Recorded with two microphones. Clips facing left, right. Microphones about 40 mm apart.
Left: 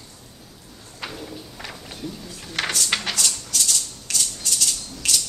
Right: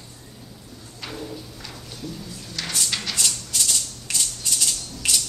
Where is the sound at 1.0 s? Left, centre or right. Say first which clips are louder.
Even; centre.